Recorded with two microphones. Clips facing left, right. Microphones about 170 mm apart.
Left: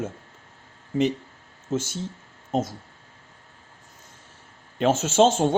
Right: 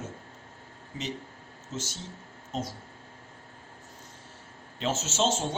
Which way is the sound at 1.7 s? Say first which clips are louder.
Left 10 dB; 55° left (ahead or behind).